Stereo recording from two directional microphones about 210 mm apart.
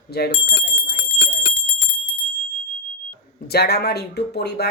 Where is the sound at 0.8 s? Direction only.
50° left (ahead or behind).